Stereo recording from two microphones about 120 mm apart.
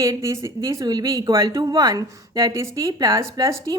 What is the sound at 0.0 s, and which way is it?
A woman's voice, 25° right (ahead or behind).